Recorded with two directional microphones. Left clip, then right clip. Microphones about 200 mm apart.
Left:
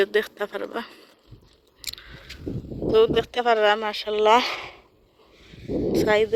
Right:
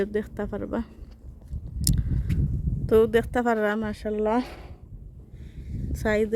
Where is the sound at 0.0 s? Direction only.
5° right (ahead or behind).